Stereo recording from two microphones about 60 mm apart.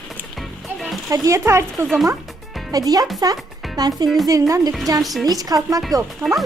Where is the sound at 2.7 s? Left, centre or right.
Right.